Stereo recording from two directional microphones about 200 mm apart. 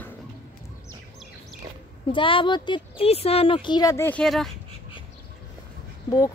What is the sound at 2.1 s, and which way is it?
Speech, 25° left (ahead or behind).